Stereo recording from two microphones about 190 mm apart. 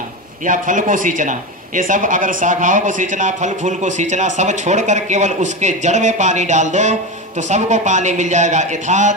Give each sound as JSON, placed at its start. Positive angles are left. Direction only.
{"t": 0.5, "sound": "speech", "side_deg": -45}